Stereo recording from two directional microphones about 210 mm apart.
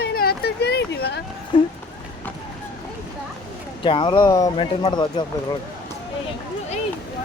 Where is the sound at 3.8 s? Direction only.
25° left (ahead or behind).